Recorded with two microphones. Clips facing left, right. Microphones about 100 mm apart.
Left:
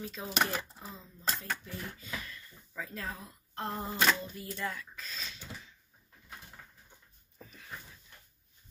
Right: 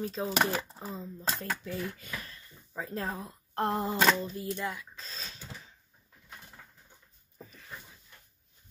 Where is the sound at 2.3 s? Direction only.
30° right (ahead or behind).